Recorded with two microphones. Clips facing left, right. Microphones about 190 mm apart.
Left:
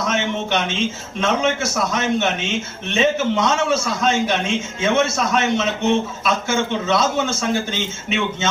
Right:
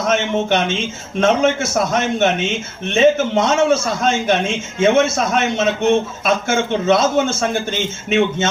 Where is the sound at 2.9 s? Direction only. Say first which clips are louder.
Right 5 dB; 50° right (ahead or behind).